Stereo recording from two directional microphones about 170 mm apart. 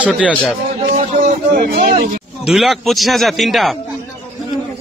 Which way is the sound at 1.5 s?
60° right (ahead or behind).